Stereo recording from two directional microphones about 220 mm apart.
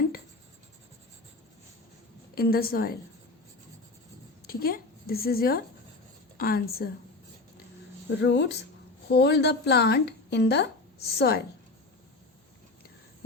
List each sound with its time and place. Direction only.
2.3 s a woman's voice: 45° left (ahead or behind)
4.4 s a woman's voice: 40° left (ahead or behind)
8.2 s a woman's voice: 50° left (ahead or behind)